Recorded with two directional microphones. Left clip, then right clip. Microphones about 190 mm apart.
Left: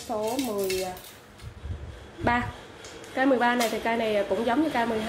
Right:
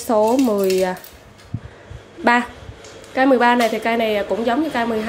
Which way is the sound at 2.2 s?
25° right (ahead or behind).